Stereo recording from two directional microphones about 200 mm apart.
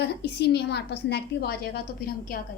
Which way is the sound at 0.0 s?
55° left (ahead or behind).